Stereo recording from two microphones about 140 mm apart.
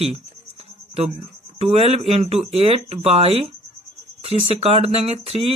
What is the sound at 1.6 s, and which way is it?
Speech, 45° right (ahead or behind).